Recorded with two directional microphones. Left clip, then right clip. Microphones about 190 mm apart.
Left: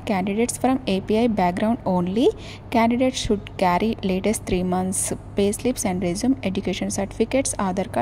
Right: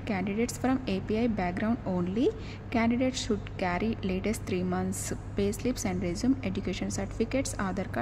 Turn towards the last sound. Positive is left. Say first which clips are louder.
# left 9 dB
turn(degrees=25)  # may be behind; listen again after turning